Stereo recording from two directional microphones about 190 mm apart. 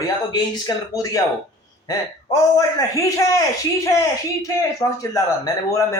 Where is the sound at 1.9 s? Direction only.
15° left (ahead or behind).